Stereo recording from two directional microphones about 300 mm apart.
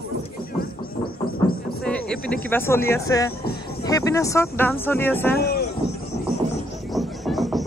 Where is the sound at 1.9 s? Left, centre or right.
Centre.